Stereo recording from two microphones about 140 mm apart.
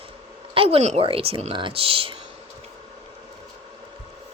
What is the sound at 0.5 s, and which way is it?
A woman's voice, 40° right (ahead or behind).